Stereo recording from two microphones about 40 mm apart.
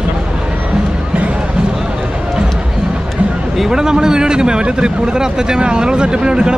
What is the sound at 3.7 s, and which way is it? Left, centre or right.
Speech, centre.